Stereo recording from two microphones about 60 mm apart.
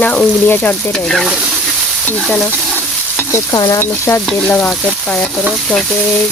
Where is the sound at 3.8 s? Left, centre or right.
Left.